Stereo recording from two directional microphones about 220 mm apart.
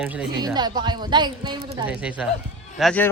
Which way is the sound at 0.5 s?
20° right (ahead or behind).